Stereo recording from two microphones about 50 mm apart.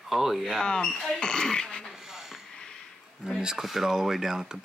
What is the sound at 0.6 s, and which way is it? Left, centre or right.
Speech, centre.